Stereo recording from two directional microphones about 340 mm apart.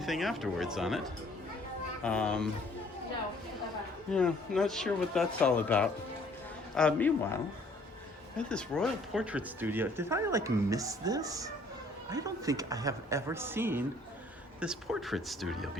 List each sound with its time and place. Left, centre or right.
0.0 s speech: centre
2.0 s speech: centre
4.1 s speech: centre
8.4 s speech: centre